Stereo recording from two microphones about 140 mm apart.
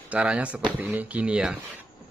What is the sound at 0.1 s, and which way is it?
Speech, 10° right (ahead or behind).